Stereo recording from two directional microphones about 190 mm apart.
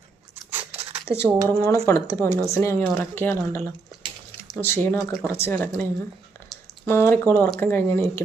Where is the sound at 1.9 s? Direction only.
15° left (ahead or behind).